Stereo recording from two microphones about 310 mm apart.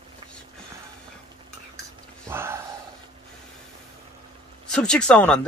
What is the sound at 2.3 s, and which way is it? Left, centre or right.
Gasp, centre.